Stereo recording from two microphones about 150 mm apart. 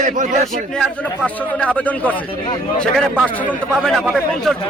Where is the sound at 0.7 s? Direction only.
5° left (ahead or behind).